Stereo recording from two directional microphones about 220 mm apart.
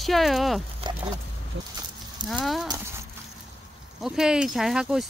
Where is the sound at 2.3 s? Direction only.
Centre (ahead or behind).